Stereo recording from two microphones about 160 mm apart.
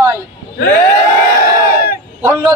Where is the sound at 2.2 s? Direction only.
15° right (ahead or behind).